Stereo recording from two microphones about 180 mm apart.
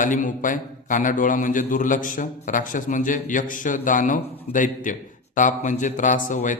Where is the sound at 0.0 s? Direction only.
45° left (ahead or behind).